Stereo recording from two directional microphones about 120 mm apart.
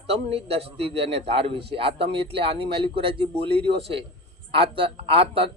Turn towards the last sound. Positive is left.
turn(degrees=-50)  # may be behind; listen again after turning